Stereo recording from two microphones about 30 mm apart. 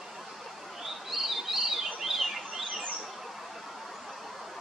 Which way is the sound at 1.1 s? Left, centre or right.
Centre.